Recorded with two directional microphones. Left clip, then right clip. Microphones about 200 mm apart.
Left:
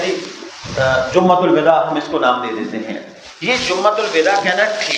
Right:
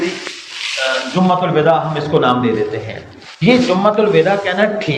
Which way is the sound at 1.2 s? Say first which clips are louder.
Left 2 dB; 45° left (ahead or behind).